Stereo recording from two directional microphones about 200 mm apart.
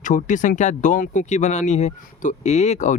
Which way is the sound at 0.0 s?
40° left (ahead or behind).